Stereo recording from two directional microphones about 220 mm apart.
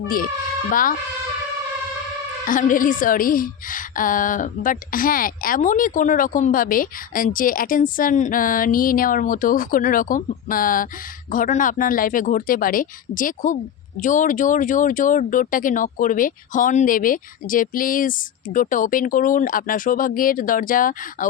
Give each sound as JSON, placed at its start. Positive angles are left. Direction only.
{"t": 0.7, "sound": "a woman's voice", "side_deg": 40}
{"t": 2.4, "sound": "a woman's voice", "side_deg": 35}